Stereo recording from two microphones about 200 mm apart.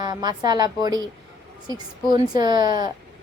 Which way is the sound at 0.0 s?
20° right (ahead or behind).